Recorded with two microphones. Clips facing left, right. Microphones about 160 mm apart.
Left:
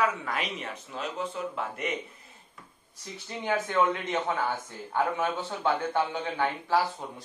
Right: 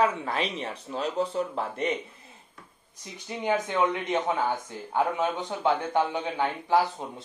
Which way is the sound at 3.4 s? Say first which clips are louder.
Right 1 dB; 15° right (ahead or behind).